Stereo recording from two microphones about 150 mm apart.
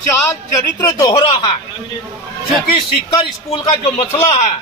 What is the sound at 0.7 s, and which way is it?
Speech, 20° left (ahead or behind).